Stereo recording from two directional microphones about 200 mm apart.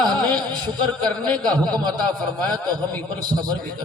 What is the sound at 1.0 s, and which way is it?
Speech, 5° left (ahead or behind).